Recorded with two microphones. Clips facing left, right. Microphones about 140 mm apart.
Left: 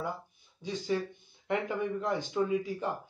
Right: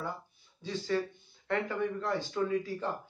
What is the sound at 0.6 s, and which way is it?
A man's voice, 15° left (ahead or behind).